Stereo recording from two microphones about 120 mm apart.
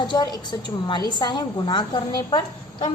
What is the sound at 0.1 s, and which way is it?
A woman's voice, 35° left (ahead or behind).